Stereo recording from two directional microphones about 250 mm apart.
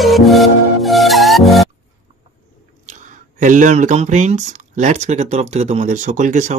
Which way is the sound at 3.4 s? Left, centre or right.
Right.